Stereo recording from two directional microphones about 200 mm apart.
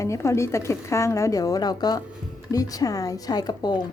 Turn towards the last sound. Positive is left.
turn(degrees=20)  # may be behind; listen again after turning